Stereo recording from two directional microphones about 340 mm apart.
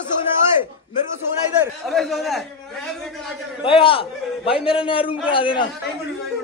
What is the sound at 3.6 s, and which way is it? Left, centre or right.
A man's voice, centre.